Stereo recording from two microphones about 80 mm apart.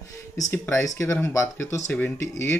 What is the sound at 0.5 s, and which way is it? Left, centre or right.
Speech, left.